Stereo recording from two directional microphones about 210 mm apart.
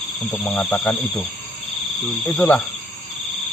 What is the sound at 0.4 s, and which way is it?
Speech, 5° left (ahead or behind).